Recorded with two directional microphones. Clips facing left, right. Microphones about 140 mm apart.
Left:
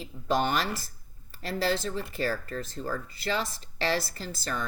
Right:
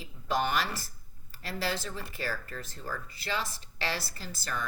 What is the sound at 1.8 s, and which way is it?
Speech, 30° left (ahead or behind).